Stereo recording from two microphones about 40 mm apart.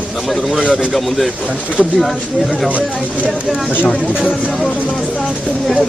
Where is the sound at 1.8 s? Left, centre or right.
Centre.